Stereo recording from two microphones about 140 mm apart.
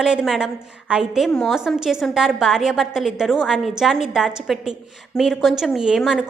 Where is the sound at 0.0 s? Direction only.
5° right (ahead or behind).